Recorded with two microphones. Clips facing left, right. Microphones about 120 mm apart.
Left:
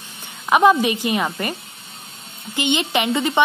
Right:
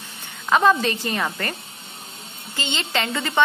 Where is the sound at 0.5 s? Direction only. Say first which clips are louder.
Left 3 dB; 15° left (ahead or behind).